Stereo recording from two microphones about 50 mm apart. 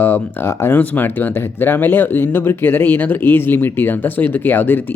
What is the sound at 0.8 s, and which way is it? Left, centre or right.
Speech, left.